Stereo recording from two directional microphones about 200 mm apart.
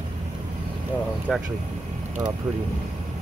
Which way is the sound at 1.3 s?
Centre (ahead or behind).